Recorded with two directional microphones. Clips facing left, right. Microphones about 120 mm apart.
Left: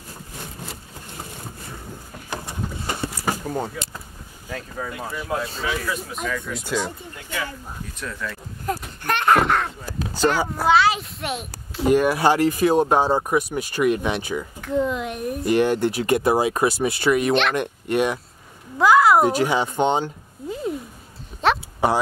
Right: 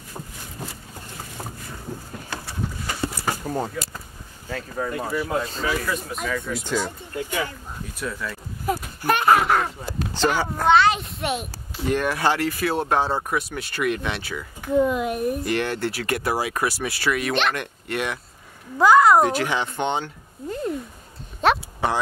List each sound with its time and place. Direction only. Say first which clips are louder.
2.2 s a sound: left 2 dB; 20° left (ahead or behind)
3.4 s speech: even; centre (ahead or behind)
4.7 s speech: right 6 dB; centre (ahead or behind)
8.0 s speech: right 2 dB; 5° right (ahead or behind)
9.8 s a child's voice: left 2 dB; 10° left (ahead or behind)
11.9 s speech: left 5 dB; 10° left (ahead or behind)
14.6 s speech: right 4 dB; 5° right (ahead or behind)
15.4 s speech: left 6 dB; 15° left (ahead or behind)
17.3 s speech: left 3 dB; centre (ahead or behind)
17.6 s speech: left 7 dB; 20° left (ahead or behind)
18.8 s speech: even; centre (ahead or behind)
19.2 s speech: left 3 dB; 15° left (ahead or behind)
21.4 s a sound: right 1 dB; centre (ahead or behind)
21.8 s speech: left 4 dB; 10° left (ahead or behind)